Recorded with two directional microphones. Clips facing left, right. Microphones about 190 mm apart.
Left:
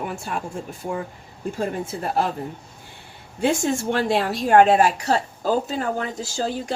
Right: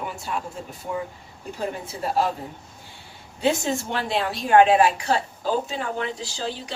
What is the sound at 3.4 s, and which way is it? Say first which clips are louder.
A woman's voice: left 2 dB; 50° left (ahead or behind).